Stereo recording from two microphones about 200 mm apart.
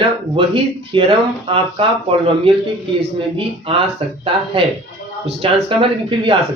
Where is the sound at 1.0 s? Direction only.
25° right (ahead or behind).